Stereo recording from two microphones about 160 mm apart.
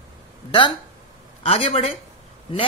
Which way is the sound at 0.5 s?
30° left (ahead or behind).